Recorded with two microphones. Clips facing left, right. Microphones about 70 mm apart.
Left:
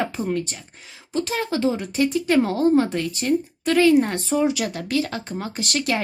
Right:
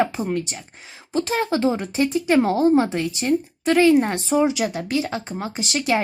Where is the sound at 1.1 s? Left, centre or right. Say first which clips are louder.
Right 3 dB; right.